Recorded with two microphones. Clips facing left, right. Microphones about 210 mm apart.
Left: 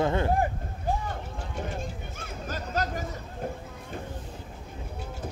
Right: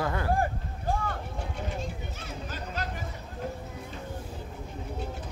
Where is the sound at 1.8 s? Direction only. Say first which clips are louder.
Even; 50° left (ahead or behind).